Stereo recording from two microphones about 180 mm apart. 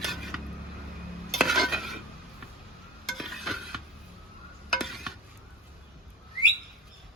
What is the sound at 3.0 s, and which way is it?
Stir, centre (ahead or behind).